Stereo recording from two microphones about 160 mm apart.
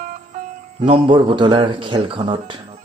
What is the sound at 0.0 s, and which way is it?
Music, 60° right (ahead or behind).